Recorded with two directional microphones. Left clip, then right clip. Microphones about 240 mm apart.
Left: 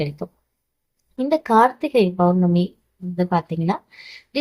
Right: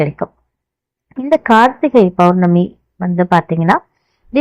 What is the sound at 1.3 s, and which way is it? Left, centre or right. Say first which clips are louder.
A woman's voice: right 6 dB; right.